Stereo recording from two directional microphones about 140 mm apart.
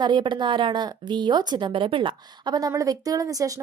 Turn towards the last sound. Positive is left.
turn(degrees=-25)  # may be behind; listen again after turning